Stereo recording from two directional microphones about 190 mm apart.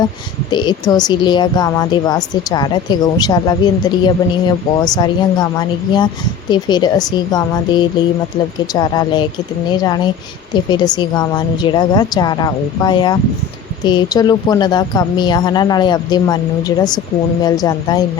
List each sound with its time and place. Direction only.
0.5 s speech: 25° left (ahead or behind)